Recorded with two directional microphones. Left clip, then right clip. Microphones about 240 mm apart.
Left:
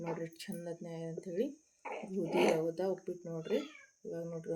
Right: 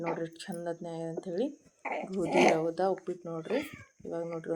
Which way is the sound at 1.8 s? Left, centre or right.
Right.